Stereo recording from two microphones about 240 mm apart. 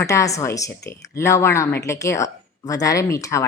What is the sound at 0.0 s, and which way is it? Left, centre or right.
Speech, centre.